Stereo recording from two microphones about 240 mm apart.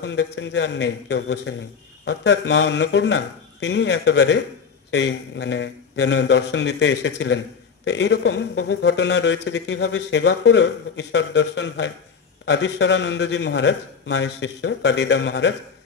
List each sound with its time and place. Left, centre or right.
0.0 s a man's voice: left